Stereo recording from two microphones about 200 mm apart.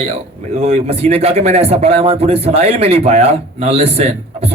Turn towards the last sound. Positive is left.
turn(degrees=-30)  # may be behind; listen again after turning